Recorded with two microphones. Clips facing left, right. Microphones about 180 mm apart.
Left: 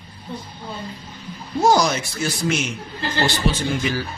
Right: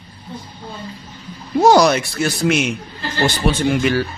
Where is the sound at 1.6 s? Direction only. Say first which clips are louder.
Right 5 dB; 70° right (ahead or behind).